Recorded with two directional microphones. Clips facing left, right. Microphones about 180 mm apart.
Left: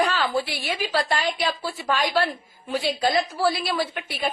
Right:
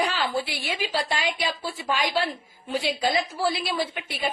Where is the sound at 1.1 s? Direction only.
45° left (ahead or behind).